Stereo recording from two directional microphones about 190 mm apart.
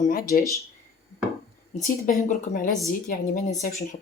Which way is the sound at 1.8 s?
45° left (ahead or behind).